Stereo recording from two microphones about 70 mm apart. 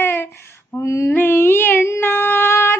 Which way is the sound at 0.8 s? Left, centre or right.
Left.